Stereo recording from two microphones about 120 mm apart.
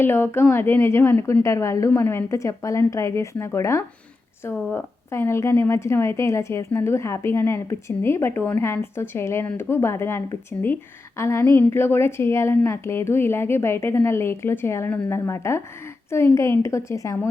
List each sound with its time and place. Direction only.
0.0 s a woman's voice: 20° left (ahead or behind)